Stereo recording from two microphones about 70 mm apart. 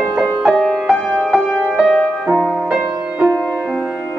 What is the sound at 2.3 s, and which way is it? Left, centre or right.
Music, centre.